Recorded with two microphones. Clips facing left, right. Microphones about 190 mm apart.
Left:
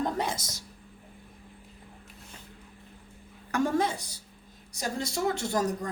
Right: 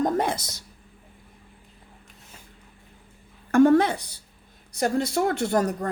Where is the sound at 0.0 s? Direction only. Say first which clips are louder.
Right 6 dB; 55° right (ahead or behind).